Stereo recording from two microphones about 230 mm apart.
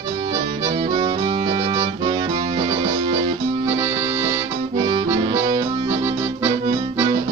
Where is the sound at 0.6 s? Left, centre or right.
Centre.